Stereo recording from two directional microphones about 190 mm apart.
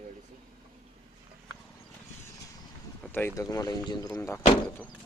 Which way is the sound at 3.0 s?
10° left (ahead or behind).